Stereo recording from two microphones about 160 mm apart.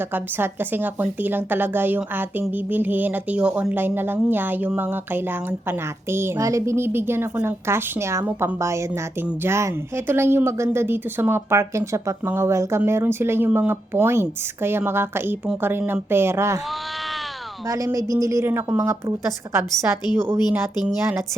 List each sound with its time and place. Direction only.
0.1 s a woman's voice: 15° right (ahead or behind)
17.7 s a woman's voice: 20° right (ahead or behind)